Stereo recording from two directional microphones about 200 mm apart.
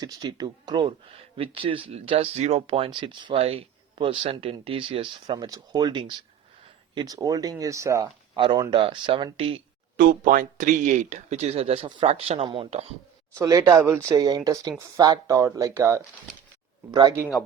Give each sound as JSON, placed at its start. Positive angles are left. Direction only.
{"t": 0.0, "sound": "speech", "side_deg": -20}
{"t": 10.0, "sound": "speech", "side_deg": -45}
{"t": 13.4, "sound": "speech", "side_deg": -15}